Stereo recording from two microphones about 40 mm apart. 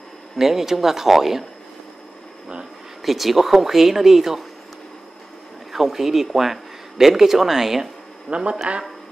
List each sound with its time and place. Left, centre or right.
0.4 s speech: centre
3.0 s speech: centre
5.7 s speech: centre
8.3 s speech: right